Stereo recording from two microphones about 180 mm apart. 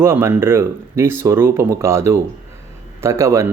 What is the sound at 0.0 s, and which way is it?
Speech, 15° right (ahead or behind).